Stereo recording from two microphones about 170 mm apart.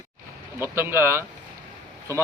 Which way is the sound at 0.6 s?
15° right (ahead or behind).